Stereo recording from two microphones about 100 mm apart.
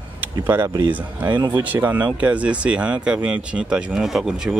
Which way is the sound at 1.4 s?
25° right (ahead or behind).